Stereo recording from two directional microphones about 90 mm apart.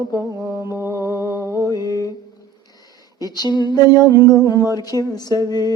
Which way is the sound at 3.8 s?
45° left (ahead or behind).